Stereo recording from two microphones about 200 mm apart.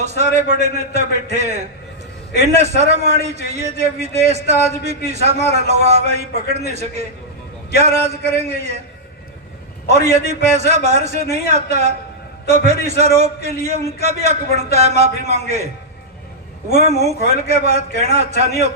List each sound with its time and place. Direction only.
0.0 s a man's voice: 35° right (ahead or behind)
9.8 s a man's voice: 35° right (ahead or behind)